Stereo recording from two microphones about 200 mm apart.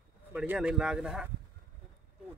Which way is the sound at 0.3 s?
5° right (ahead or behind).